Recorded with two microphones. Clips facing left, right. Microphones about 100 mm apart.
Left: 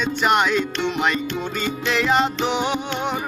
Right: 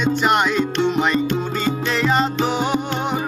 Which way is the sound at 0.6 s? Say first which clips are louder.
Right 4 dB; 45° right (ahead or behind).